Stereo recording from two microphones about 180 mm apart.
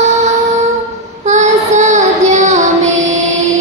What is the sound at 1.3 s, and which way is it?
Child singing, 40° right (ahead or behind).